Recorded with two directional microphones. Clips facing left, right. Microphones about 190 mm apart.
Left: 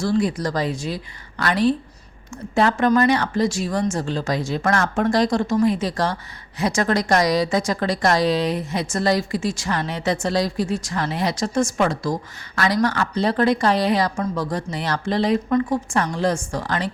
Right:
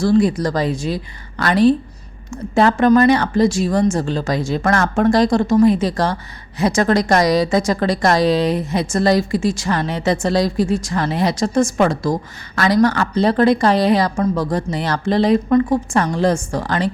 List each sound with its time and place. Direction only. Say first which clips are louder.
0.2 s speech: right 5 dB; 30° right (ahead or behind)
15.4 s a woman's voice: right 5 dB; 45° right (ahead or behind)
16.0 s speech: right 4 dB; 30° right (ahead or behind)